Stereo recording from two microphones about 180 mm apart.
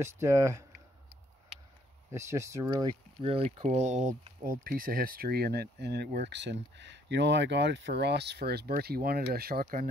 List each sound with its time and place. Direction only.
0.0 s speech: 15° right (ahead or behind)
2.0 s speech: 15° right (ahead or behind)
2.7 s speech: 30° right (ahead or behind)
4.5 s speech: 50° right (ahead or behind)